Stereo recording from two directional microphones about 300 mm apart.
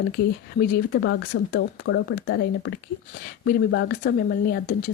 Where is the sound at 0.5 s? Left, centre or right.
Left.